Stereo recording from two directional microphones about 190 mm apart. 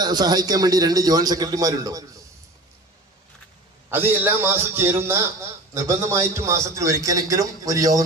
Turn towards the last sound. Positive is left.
turn(degrees=-15)  # may be behind; listen again after turning